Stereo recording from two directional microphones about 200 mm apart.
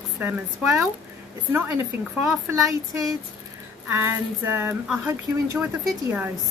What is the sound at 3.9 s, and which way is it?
A woman's voice, 10° right (ahead or behind).